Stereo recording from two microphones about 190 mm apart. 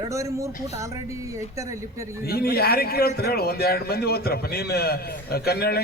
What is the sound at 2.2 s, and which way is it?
A man's voice, 55° left (ahead or behind).